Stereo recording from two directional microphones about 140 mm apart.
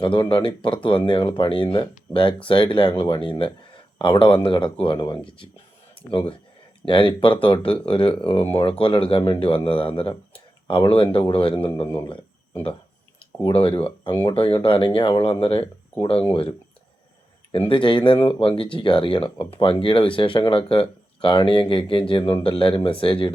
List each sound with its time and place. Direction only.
0.0 s speech: 35° left (ahead or behind)
13.4 s speech: 40° left (ahead or behind)
17.7 s speech: 35° left (ahead or behind)